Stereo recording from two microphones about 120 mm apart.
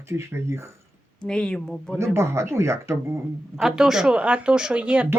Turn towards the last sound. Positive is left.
turn(degrees=-10)  # may be behind; listen again after turning